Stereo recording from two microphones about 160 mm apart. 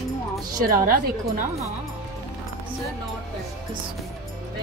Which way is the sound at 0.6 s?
60° right (ahead or behind).